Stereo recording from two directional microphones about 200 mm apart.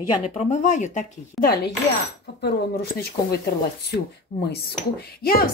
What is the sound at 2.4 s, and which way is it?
Speech, 50° left (ahead or behind).